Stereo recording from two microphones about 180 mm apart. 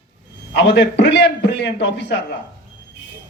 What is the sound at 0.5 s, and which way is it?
A man's voice, 75° left (ahead or behind).